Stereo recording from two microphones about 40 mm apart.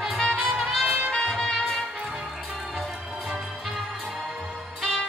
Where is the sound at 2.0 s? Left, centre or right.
Centre.